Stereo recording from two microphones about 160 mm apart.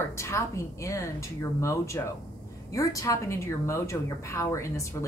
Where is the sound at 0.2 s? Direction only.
20° left (ahead or behind).